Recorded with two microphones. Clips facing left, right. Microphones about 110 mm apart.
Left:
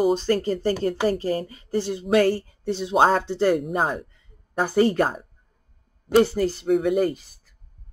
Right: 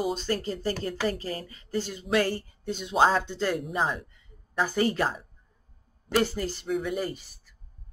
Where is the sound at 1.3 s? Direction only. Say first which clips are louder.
Left 9 dB; 30° left (ahead or behind).